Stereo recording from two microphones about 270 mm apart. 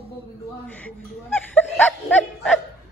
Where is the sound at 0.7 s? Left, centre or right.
Centre.